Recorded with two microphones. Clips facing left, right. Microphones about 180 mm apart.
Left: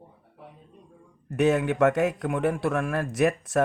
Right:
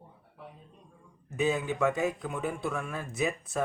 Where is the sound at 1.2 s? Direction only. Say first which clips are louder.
Left 7 dB; 80° left.